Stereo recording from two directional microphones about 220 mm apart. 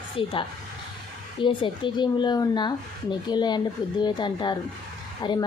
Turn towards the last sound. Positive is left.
turn(degrees=20)  # may be behind; listen again after turning